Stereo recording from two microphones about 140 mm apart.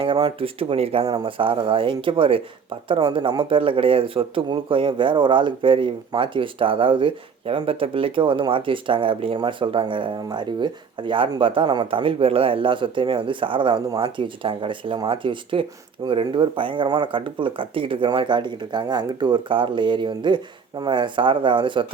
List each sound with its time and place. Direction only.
0.0 s speech: 35° right (ahead or behind)